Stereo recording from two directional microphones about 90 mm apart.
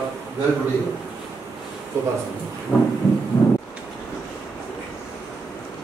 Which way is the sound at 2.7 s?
25° left (ahead or behind).